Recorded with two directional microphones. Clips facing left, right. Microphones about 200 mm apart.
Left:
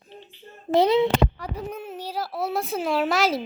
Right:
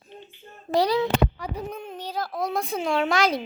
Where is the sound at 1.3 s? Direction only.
5° left (ahead or behind).